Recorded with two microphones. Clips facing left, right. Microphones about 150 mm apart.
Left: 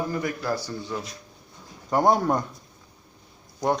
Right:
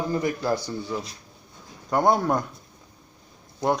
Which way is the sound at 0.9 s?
5° right (ahead or behind).